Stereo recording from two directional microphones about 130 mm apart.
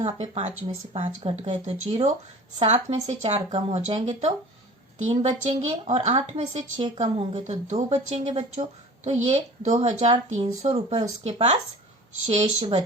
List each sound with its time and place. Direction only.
0.0 s speech: 55° right (ahead or behind)